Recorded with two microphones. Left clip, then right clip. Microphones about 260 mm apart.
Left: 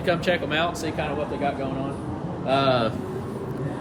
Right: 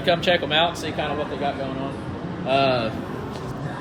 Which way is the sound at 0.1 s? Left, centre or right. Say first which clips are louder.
Right 4 dB; centre.